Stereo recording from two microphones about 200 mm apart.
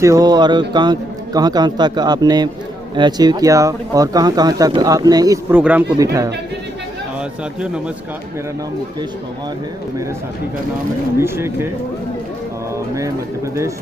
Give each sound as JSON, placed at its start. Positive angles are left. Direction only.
{"t": 0.0, "sound": "a man's voice", "side_deg": -15}
{"t": 11.2, "sound": "speech", "side_deg": -10}
{"t": 13.0, "sound": "speech", "side_deg": -15}